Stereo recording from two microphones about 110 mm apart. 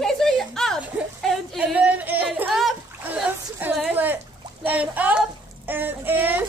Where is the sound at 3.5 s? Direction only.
15° right (ahead or behind).